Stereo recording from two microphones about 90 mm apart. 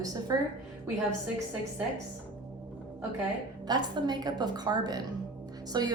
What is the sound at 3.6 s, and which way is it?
A woman's voice, 55° right (ahead or behind).